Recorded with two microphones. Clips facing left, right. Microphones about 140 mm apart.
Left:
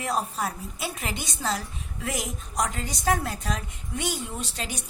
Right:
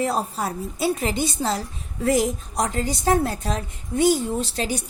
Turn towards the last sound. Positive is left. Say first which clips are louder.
# right 9 dB
turn(degrees=-35)  # may be behind; listen again after turning